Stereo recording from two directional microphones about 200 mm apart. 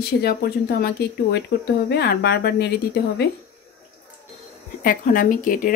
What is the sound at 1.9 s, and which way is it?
Speech, 55° left (ahead or behind).